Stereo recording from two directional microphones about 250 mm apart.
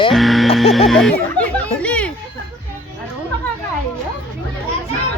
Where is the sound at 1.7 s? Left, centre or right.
Centre.